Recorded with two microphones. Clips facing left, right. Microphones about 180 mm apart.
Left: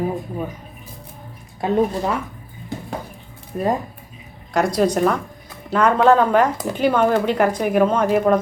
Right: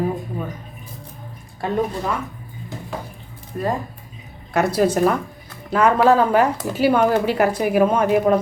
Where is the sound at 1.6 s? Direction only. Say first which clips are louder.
Left 3 dB; 15° left (ahead or behind).